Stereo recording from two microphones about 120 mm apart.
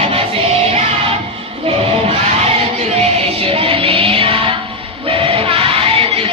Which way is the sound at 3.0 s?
50° right (ahead or behind).